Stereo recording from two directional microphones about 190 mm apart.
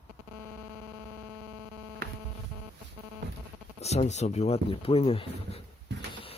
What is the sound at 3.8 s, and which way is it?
Speech, 35° left (ahead or behind).